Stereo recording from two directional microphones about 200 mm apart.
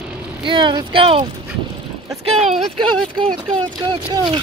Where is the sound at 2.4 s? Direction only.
Centre (ahead or behind).